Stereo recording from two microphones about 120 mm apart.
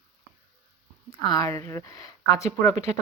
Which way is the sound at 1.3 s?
30° left (ahead or behind).